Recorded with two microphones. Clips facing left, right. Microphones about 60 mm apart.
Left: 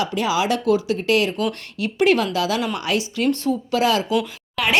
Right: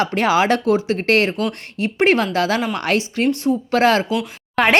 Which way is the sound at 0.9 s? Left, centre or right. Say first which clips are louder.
Right 2 dB; right.